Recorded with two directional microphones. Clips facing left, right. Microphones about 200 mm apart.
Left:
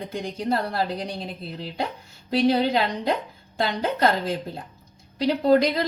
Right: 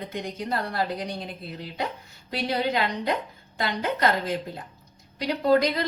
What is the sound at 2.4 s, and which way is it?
A woman's voice, 30° left (ahead or behind).